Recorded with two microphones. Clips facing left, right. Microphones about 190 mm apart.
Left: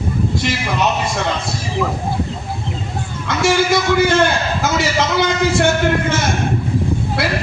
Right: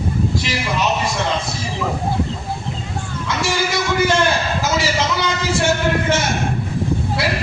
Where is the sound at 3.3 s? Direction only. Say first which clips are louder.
Left 6 dB; 60° left (ahead or behind).